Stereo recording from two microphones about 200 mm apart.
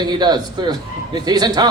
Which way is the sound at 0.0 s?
20° right (ahead or behind).